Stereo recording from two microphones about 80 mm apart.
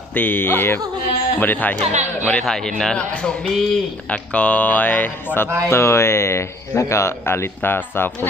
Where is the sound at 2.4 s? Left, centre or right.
Centre.